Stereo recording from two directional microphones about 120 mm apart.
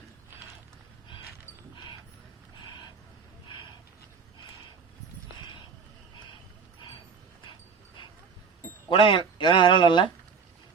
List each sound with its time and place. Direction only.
8.9 s speech: 45° left (ahead or behind)